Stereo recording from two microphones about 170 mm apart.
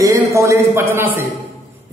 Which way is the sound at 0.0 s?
15° right (ahead or behind).